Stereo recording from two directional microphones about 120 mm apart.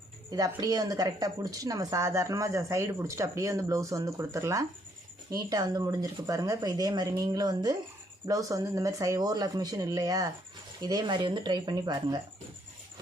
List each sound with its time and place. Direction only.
0.3 s speech: 30° right (ahead or behind)